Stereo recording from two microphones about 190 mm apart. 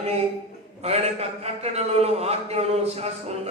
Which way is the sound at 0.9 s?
35° right (ahead or behind).